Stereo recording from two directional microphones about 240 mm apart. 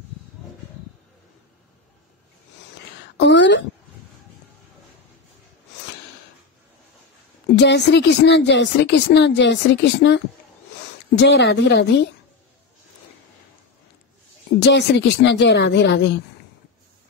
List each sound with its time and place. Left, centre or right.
3.2 s speech: left
7.5 s speech: left
14.6 s speech: left